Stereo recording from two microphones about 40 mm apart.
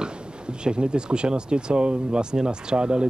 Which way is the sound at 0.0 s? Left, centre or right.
Right.